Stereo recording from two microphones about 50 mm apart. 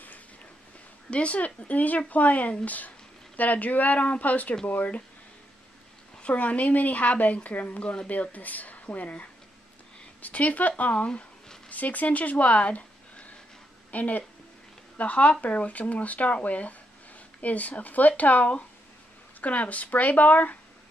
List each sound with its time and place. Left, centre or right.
1.1 s speech: left
6.1 s a woman's voice: left